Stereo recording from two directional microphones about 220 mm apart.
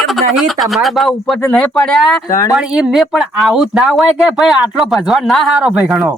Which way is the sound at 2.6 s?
5° right (ahead or behind).